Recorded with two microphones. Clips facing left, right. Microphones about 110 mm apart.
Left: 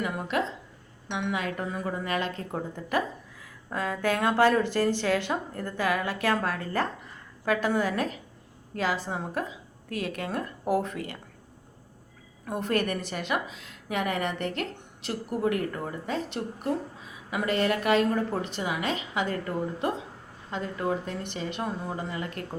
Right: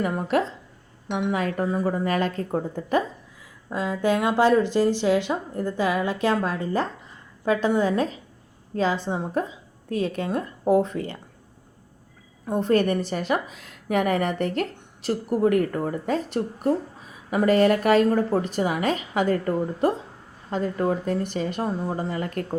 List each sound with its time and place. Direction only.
0.0 s a woman's voice: 40° right (ahead or behind)
3.7 s speech: 20° right (ahead or behind)
12.5 s a woman's voice: 30° right (ahead or behind)